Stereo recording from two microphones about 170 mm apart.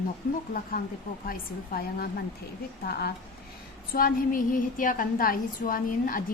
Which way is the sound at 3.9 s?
55° left (ahead or behind).